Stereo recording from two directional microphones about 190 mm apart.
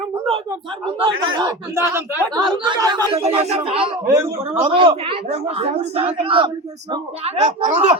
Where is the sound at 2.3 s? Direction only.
25° right (ahead or behind).